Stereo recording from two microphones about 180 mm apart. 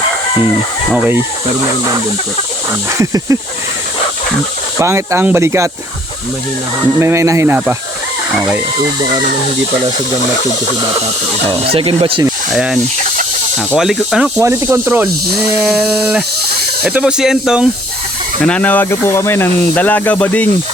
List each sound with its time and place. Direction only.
0.9 s speech: centre (ahead or behind)
3.0 s speech: 15° right (ahead or behind)
4.8 s speech: 15° right (ahead or behind)
7.0 s speech: 15° right (ahead or behind)
11.4 s speech: 30° right (ahead or behind)
12.5 s speech: 5° right (ahead or behind)
14.3 s speech: 15° right (ahead or behind)
15.5 s speech: 5° right (ahead or behind)
18.4 s speech: 5° left (ahead or behind)